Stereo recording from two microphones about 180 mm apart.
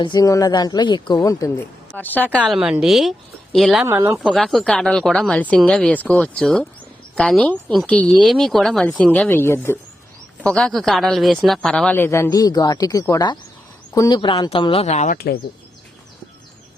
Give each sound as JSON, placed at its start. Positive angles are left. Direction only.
{"t": 0.0, "sound": "speech", "side_deg": 20}
{"t": 2.4, "sound": "speech", "side_deg": -5}
{"t": 3.8, "sound": "speech", "side_deg": -15}
{"t": 4.2, "sound": "speech", "side_deg": 0}